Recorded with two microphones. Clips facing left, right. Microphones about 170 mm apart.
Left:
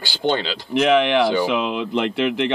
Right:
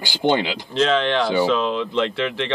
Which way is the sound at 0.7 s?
15° left (ahead or behind).